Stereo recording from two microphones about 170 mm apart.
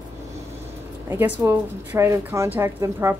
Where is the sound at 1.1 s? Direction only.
15° right (ahead or behind).